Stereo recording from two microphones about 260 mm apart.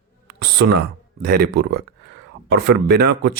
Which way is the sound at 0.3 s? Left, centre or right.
Right.